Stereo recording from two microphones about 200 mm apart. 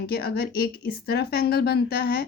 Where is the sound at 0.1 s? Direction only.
50° left (ahead or behind).